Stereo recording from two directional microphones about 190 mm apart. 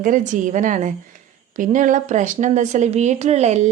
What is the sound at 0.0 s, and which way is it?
A woman's voice, 45° right (ahead or behind).